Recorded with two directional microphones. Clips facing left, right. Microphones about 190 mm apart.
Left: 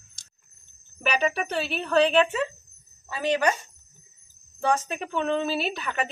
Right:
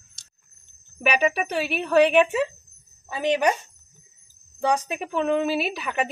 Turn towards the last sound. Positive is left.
turn(degrees=-10)  # may be behind; listen again after turning